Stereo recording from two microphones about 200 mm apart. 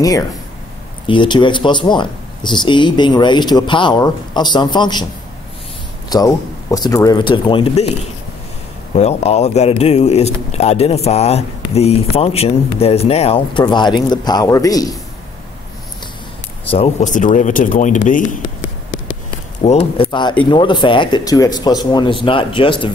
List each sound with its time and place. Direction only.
1.0 s speech: 25° left (ahead or behind)
6.0 s speech: 20° left (ahead or behind)
8.9 s a man's voice: 35° left (ahead or behind); by 15.0 s 20° left (ahead or behind)
16.7 s a man's voice: 35° left (ahead or behind)
19.6 s speech: 30° left (ahead or behind)